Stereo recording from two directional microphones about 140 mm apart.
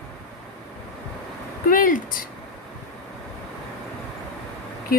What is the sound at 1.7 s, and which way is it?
Speech, 75° left (ahead or behind).